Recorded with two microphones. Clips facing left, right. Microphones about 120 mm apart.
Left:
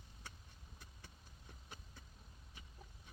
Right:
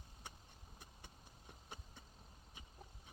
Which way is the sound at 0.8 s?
20° right (ahead or behind).